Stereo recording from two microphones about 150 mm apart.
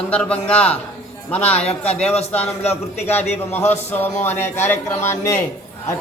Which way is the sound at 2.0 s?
45° left (ahead or behind).